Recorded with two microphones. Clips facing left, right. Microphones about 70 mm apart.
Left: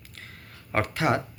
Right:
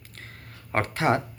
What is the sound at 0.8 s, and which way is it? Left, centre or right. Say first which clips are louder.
Speech: right 1 dB; right.